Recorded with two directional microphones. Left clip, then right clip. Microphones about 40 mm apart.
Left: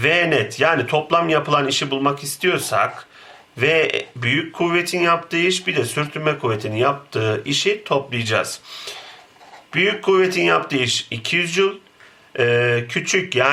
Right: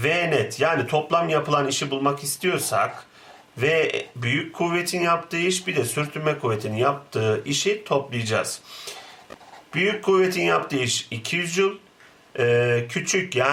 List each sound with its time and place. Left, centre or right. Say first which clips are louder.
0.0 s speech: left 5 dB; centre